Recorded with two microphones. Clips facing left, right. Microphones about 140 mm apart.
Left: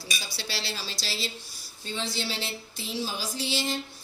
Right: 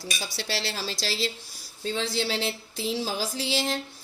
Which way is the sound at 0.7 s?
90° right.